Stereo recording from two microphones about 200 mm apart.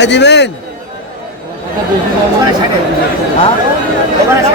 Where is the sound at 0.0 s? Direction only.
60° left (ahead or behind).